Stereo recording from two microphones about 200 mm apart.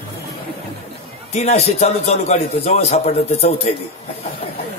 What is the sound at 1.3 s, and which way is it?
A man's voice, 35° left (ahead or behind).